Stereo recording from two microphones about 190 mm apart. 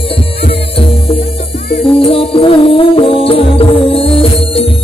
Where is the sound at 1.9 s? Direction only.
30° left (ahead or behind).